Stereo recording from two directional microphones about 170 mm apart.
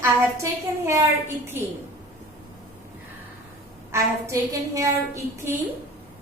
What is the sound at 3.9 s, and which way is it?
A woman's voice, 20° right (ahead or behind).